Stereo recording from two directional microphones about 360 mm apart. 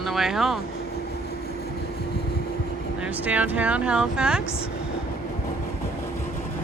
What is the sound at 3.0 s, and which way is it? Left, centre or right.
Speech, centre.